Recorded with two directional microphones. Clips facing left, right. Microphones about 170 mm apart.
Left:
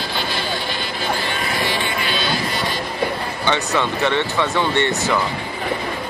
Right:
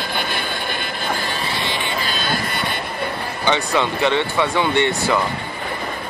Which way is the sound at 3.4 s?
15° right (ahead or behind).